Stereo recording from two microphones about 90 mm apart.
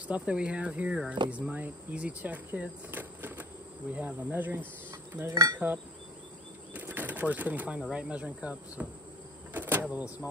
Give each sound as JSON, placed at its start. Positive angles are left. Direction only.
{"t": 0.1, "sound": "speech", "side_deg": -10}
{"t": 3.9, "sound": "insect", "side_deg": -20}
{"t": 6.7, "sound": "bird", "side_deg": -20}
{"t": 7.9, "sound": "speech", "side_deg": -15}
{"t": 9.5, "sound": "power windows", "side_deg": -20}